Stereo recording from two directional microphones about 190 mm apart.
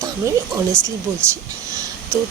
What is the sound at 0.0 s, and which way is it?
Speech, 15° right (ahead or behind).